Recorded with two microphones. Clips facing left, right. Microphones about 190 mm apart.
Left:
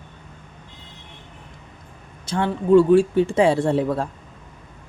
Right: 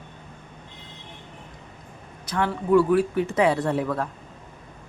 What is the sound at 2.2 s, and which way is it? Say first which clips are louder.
A woman's voice: left 3 dB; 25° left (ahead or behind).